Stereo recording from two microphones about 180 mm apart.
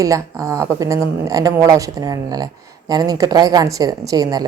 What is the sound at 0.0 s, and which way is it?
A woman's voice, 15° right (ahead or behind).